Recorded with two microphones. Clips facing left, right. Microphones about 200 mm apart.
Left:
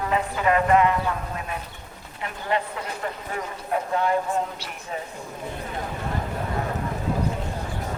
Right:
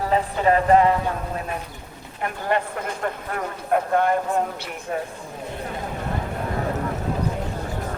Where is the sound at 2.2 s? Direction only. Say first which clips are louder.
Right 3 dB; 50° right (ahead or behind).